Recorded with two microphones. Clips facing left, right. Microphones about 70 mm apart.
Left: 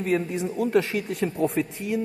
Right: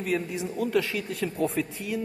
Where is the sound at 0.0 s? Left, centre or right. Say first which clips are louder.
Left 4 dB; left.